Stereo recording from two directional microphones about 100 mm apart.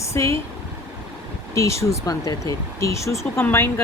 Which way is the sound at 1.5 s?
30° left (ahead or behind).